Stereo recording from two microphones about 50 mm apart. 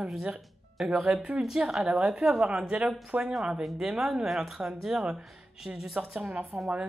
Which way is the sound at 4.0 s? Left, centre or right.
Centre.